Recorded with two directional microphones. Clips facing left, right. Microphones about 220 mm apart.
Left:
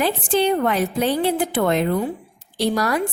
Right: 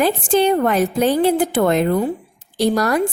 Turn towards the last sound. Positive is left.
turn(degrees=-45)  # may be behind; listen again after turning